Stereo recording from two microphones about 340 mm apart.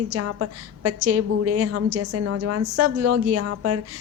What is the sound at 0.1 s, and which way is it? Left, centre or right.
A woman's voice, right.